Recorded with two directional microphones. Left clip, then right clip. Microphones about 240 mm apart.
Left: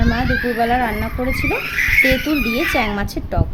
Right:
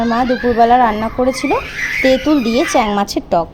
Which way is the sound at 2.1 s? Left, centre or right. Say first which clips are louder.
Right 5 dB; centre.